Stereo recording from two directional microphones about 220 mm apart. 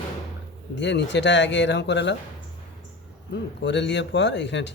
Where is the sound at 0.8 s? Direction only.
55° left (ahead or behind).